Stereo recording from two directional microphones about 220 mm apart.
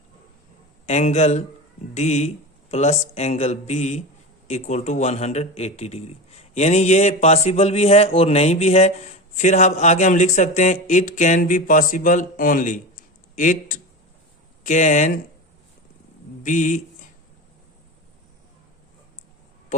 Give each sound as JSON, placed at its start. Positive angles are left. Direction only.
{"t": 0.9, "sound": "a man's voice", "side_deg": 30}
{"t": 16.4, "sound": "speech", "side_deg": 35}